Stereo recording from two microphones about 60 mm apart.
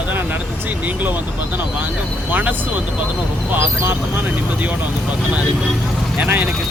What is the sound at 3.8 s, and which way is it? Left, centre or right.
Speech, right.